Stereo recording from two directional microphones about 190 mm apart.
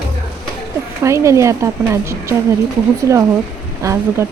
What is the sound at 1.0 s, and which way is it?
Speech, 15° right (ahead or behind).